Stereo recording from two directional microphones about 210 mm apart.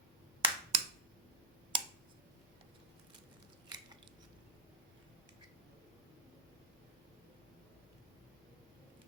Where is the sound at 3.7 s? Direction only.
20° right (ahead or behind).